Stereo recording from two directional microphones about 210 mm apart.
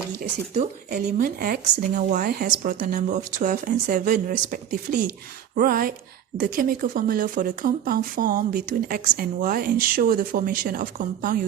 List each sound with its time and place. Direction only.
1.0 s a woman's voice: 45° right (ahead or behind)